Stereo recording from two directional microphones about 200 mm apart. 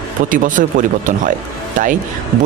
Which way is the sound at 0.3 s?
40° right (ahead or behind).